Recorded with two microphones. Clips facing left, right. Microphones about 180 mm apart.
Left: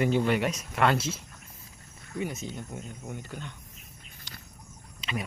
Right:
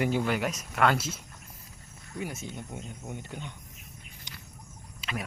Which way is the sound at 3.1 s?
15° right (ahead or behind).